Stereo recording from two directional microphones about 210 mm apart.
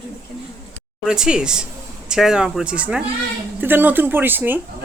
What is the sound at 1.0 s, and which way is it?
Speech, 5° right (ahead or behind).